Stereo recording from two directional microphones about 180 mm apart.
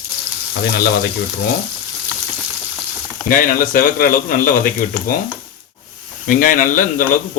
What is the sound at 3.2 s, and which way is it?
Speech, 50° left (ahead or behind).